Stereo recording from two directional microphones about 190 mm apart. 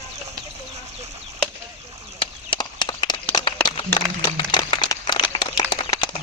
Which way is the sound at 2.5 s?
25° left (ahead or behind).